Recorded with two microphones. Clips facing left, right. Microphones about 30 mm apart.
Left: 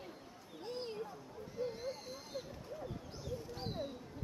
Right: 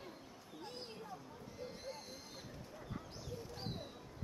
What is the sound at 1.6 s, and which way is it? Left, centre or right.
Owl, centre.